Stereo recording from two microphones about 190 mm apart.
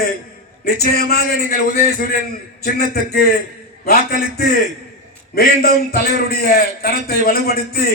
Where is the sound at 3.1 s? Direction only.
50° left (ahead or behind).